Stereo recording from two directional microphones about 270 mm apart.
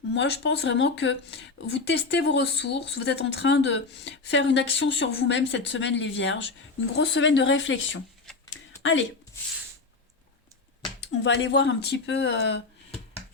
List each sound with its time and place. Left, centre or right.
0.1 s a woman's voice: left
11.0 s speech: left